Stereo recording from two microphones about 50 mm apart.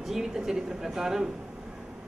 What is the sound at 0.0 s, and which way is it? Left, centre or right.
Speech, centre.